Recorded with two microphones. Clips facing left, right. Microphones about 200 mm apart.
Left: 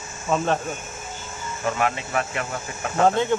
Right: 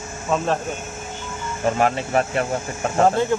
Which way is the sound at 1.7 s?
35° right (ahead or behind).